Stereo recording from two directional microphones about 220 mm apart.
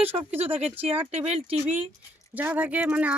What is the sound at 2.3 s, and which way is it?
Speech, 5° right (ahead or behind).